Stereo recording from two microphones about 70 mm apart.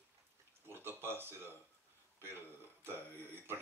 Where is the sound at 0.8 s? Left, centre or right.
Right.